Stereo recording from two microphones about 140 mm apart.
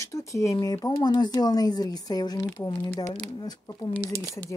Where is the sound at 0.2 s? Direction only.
20° left (ahead or behind).